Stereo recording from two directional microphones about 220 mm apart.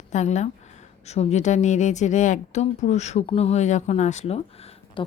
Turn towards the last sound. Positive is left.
turn(degrees=25)  # may be behind; listen again after turning